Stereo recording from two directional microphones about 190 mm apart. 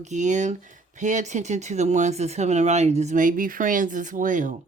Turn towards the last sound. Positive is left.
turn(degrees=-45)  # may be behind; listen again after turning